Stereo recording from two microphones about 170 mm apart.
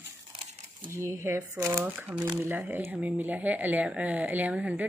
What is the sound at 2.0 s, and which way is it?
Speech, 5° right (ahead or behind).